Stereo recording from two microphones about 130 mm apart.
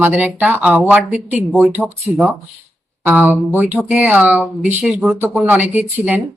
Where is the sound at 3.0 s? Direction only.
15° right (ahead or behind).